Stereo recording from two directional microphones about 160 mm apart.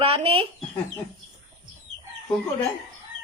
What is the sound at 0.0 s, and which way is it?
Speech, 35° right (ahead or behind).